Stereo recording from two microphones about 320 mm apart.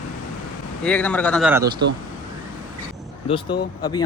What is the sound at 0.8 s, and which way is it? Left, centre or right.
Speech, centre.